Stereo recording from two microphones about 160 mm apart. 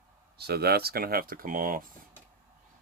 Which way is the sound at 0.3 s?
85° right.